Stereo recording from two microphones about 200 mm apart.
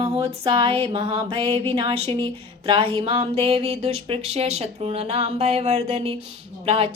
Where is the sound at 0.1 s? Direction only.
30° right (ahead or behind).